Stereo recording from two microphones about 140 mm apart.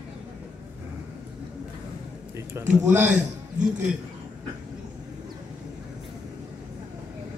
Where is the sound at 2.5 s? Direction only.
20° right (ahead or behind).